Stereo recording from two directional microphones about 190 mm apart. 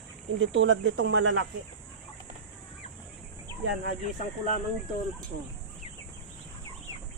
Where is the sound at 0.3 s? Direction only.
80° right.